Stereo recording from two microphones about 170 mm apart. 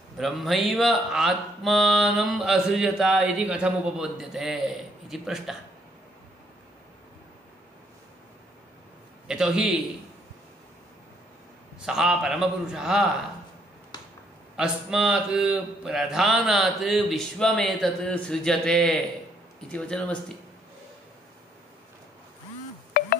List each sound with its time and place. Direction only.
0.2 s speech: centre (ahead or behind)
9.3 s speech: 5° right (ahead or behind)
11.8 s speech: 5° right (ahead or behind)
13.9 s finger snapping: 25° left (ahead or behind)
14.6 s speech: 5° right (ahead or behind)
23.0 s music: 65° left (ahead or behind)